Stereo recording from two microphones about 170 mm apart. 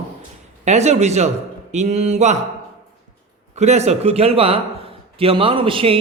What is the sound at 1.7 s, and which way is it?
Mantra, 40° right (ahead or behind).